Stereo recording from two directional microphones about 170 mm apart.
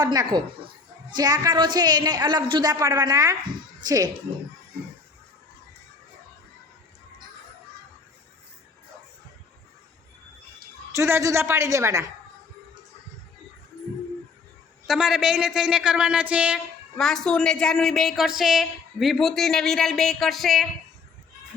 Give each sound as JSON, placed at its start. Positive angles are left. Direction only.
{"t": 0.0, "sound": "a woman's voice", "side_deg": -25}
{"t": 10.9, "sound": "a woman's voice", "side_deg": -15}
{"t": 14.8, "sound": "a woman's voice", "side_deg": -5}
{"t": 17.0, "sound": "a woman's voice", "side_deg": 5}